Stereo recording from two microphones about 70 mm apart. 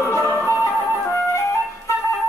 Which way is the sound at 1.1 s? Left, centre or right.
Left.